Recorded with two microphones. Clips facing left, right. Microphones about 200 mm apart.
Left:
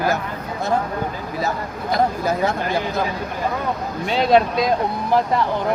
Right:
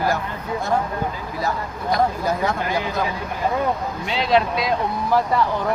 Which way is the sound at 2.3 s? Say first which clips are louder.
Left 2 dB; 25° left (ahead or behind).